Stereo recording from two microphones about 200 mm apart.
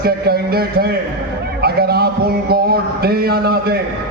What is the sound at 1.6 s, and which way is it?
A man's voice, 50° right (ahead or behind).